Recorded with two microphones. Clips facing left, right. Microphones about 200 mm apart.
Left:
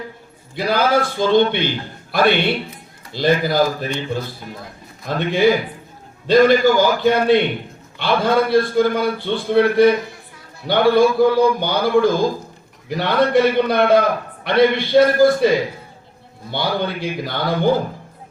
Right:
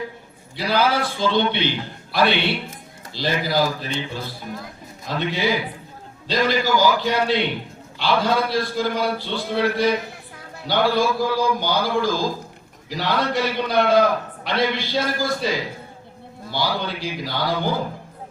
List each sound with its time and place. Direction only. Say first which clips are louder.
0.5 s a man's voice: left 3 dB; 50° left (ahead or behind)